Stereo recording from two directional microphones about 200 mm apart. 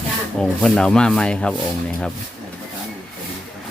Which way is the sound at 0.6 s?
5° left (ahead or behind).